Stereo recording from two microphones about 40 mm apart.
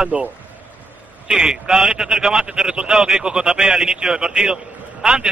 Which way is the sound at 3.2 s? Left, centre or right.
Centre.